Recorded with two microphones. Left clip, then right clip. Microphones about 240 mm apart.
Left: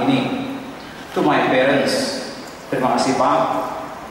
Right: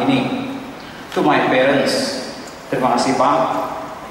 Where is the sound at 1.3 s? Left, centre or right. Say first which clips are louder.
Right 1 dB; centre.